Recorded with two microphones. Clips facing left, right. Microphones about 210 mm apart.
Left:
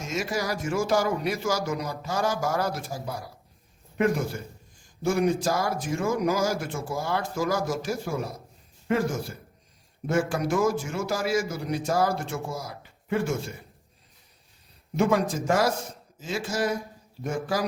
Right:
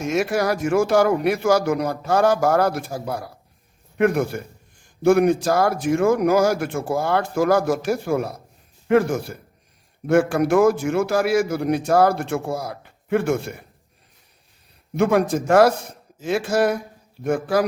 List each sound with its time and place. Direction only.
0.0 s a man's voice: 60° right (ahead or behind)
14.9 s a man's voice: 60° right (ahead or behind)